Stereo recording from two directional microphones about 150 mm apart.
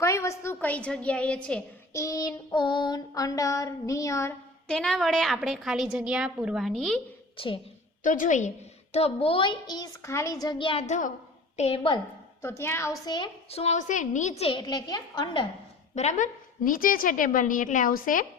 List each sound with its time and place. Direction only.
0.0 s a woman's voice: 20° left (ahead or behind)
1.9 s child singing: 20° left (ahead or behind)
2.6 s a sound: 30° left (ahead or behind)
4.7 s a woman's voice: 5° left (ahead or behind)
7.3 s a woman's voice: 35° left (ahead or behind)
8.0 s a woman's voice: 60° left (ahead or behind); by 10.8 s 35° left (ahead or behind)
10.8 s a woman's voice: 55° left (ahead or behind)
12.4 s a woman's voice: 15° left (ahead or behind); by 14.6 s 40° left (ahead or behind)
14.6 s a sound: 30° left (ahead or behind)
16.0 s a woman's voice: 55° left (ahead or behind)